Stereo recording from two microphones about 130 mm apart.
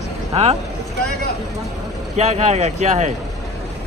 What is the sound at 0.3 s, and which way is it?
Speech, 55° right (ahead or behind).